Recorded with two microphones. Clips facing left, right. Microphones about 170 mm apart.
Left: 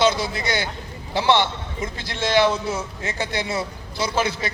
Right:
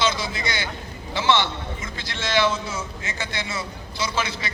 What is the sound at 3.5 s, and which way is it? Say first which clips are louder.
A man's voice: left 5 dB; 60° left (ahead or behind).